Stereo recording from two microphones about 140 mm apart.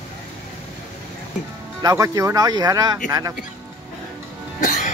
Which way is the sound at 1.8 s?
25° right (ahead or behind).